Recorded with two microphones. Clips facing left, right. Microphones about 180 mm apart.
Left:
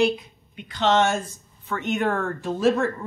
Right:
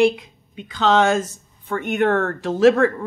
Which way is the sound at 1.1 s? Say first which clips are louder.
Right 7 dB; 90° right.